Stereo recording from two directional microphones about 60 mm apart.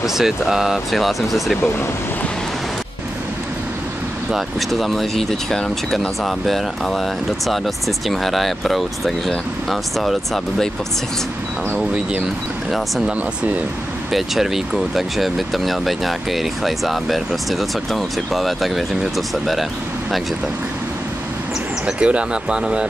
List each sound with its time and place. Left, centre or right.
0.0 s speech: centre
4.3 s speech: centre
12.7 s speech: centre
14.1 s speech: centre
21.8 s speech: centre